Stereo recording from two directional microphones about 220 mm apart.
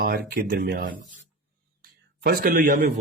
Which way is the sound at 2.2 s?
40° right (ahead or behind).